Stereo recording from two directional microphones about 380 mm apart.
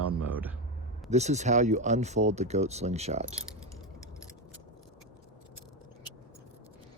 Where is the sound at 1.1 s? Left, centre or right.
Centre.